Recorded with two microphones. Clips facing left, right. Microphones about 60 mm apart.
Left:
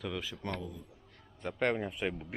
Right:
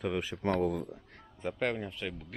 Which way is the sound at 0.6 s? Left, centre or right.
Right.